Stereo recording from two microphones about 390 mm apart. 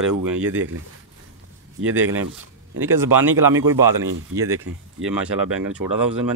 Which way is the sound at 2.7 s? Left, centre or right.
Centre.